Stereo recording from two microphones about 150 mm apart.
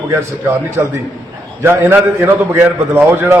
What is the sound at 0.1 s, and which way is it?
A man's voice, 20° right (ahead or behind).